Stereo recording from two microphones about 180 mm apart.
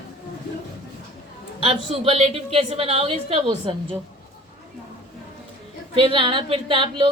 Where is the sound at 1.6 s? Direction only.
35° right (ahead or behind).